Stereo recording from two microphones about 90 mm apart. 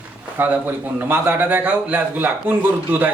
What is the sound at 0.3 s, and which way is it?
A man's voice, 20° right (ahead or behind).